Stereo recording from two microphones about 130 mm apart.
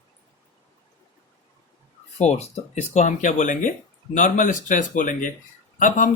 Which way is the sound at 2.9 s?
70° left (ahead or behind).